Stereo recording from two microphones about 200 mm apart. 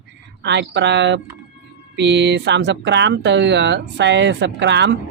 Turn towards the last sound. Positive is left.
turn(degrees=-60)  # may be behind; listen again after turning